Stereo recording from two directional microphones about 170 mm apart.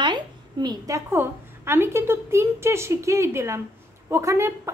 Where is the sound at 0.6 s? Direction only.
20° right (ahead or behind).